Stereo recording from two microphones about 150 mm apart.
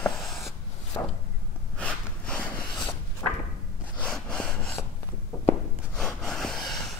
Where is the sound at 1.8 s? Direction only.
10° left (ahead or behind).